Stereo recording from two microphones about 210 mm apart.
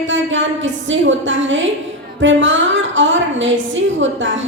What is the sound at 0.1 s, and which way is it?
A woman's voice, 65° right (ahead or behind).